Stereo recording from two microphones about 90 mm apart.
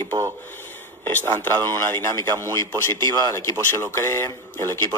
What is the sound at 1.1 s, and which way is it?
Speech, 20° left (ahead or behind).